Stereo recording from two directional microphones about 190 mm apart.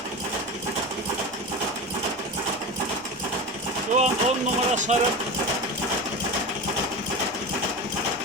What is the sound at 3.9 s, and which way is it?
Speech, 40° right (ahead or behind).